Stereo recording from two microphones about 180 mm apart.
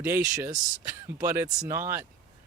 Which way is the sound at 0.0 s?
15° right (ahead or behind).